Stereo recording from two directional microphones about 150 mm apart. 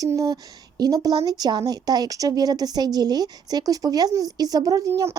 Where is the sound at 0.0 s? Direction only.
25° right (ahead or behind).